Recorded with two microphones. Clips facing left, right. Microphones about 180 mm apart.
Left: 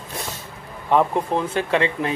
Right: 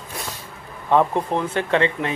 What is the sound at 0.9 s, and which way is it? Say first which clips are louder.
Speech: even; 15° left (ahead or behind).